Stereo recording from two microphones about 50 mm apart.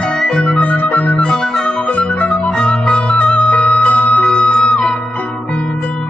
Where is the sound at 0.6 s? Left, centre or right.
Left.